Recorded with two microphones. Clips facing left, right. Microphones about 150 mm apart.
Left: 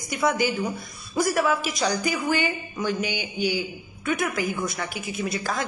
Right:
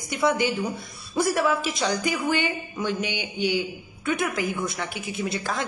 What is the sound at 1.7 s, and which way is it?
A woman's voice, 25° right (ahead or behind).